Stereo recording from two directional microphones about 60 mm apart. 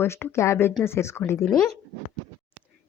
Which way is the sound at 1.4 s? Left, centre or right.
Centre.